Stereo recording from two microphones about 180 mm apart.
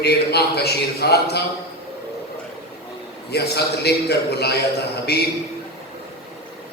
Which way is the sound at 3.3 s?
65° left (ahead or behind).